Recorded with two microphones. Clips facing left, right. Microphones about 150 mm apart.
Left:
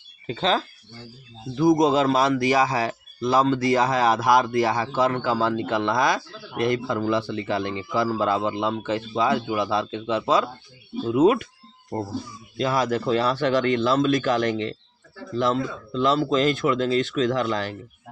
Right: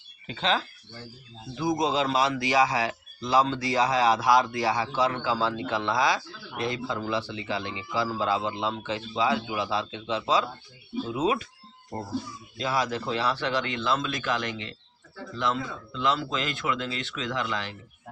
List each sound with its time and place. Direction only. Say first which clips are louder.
0.3 s speech: left 4 dB; 40° left (ahead or behind)
1.6 s a man's voice: left 8 dB; 45° left (ahead or behind)
12.5 s a man's voice: left 5 dB; 50° left (ahead or behind)